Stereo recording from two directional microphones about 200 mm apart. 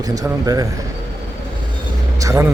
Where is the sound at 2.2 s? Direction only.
15° right (ahead or behind).